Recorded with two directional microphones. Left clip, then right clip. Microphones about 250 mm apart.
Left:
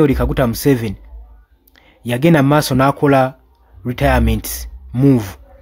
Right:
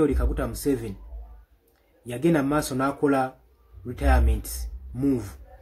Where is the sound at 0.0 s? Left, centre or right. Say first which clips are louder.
Left 10 dB; left.